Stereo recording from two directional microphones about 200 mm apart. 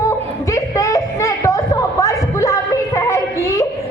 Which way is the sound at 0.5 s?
15° left (ahead or behind).